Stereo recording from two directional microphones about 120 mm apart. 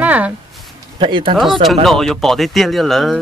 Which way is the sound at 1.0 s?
45° right (ahead or behind).